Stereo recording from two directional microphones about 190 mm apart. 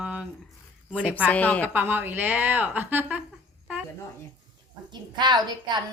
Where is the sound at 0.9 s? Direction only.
5° right (ahead or behind).